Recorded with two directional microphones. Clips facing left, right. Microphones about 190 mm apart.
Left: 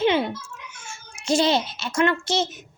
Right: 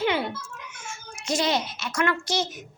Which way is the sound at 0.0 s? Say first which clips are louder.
Left 5 dB; 25° left (ahead or behind).